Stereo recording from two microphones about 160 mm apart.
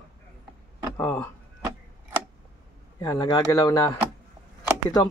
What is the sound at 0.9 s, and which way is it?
Speech, 20° left (ahead or behind).